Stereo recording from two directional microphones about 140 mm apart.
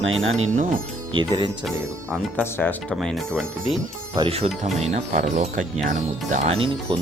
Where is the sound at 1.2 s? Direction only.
35° right (ahead or behind).